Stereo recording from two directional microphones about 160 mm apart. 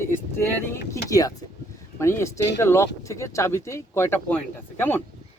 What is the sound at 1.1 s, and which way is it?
Speech, 20° left (ahead or behind).